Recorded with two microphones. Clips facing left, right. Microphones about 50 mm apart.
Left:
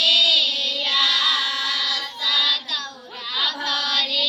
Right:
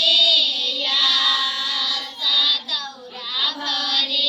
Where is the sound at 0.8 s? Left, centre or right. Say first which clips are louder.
Even; left.